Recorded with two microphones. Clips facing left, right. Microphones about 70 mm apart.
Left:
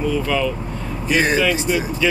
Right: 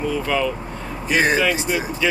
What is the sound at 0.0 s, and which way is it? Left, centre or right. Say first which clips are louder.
Speech: left 1 dB; right.